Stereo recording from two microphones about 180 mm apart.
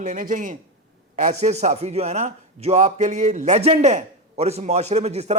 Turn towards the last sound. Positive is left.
turn(degrees=-35)  # may be behind; listen again after turning